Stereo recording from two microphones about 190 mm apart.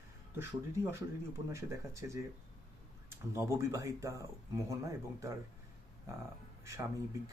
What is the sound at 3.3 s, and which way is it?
Speech, 15° right (ahead or behind).